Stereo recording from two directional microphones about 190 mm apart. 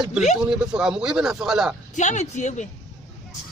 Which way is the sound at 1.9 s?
40° left (ahead or behind).